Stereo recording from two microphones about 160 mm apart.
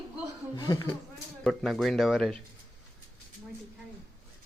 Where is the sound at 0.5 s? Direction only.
20° left (ahead or behind).